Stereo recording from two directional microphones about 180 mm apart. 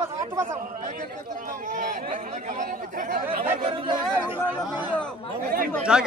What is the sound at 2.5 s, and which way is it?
Chatter, 45° right (ahead or behind).